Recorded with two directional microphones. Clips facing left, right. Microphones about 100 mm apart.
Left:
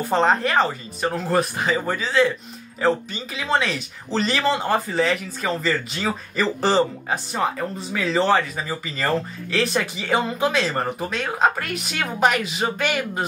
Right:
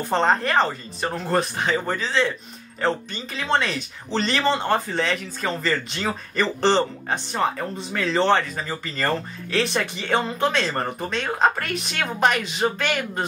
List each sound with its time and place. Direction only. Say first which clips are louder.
0.1 s speech: left 1 dB; 5° left (ahead or behind)